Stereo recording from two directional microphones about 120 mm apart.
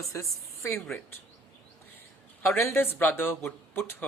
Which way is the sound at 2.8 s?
15° left (ahead or behind).